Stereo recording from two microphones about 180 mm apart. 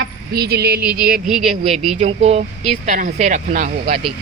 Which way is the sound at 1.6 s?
35° right (ahead or behind).